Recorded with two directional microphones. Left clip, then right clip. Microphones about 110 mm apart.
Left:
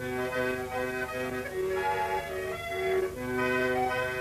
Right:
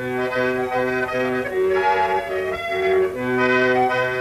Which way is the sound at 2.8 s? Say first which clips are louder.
Right 10 dB; 30° right (ahead or behind).